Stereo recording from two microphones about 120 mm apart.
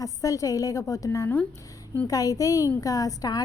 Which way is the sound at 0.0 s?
30° left (ahead or behind).